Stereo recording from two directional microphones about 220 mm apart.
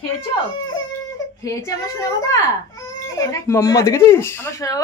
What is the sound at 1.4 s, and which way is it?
A child's voice, 15° left (ahead or behind).